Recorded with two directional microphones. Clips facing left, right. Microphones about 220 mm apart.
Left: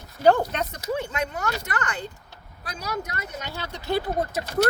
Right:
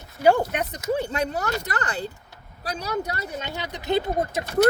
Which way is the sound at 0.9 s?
35° right (ahead or behind).